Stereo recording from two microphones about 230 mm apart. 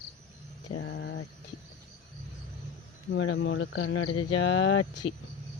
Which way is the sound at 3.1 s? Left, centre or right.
Left.